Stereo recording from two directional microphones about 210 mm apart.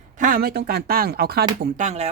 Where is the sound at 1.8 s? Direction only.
30° right (ahead or behind).